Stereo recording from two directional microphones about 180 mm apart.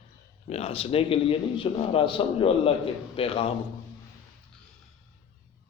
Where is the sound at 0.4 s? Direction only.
35° left (ahead or behind).